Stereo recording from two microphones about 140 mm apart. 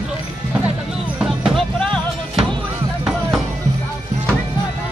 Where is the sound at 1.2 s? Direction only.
Centre (ahead or behind).